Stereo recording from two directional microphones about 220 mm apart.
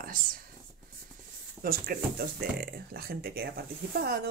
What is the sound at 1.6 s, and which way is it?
Speech, 40° right (ahead or behind).